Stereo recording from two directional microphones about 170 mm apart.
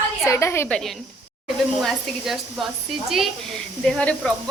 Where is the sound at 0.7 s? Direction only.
Centre (ahead or behind).